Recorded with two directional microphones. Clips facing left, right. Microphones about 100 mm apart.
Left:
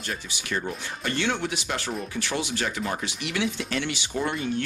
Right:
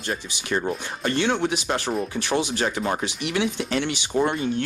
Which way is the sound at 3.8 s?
45° right (ahead or behind).